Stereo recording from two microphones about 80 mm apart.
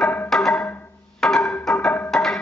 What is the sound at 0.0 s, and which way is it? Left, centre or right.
Music, left.